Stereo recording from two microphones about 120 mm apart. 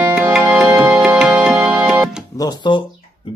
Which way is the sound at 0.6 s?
20° right (ahead or behind).